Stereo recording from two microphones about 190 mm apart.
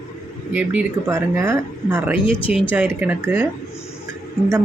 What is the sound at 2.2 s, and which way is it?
Speech, 25° left (ahead or behind).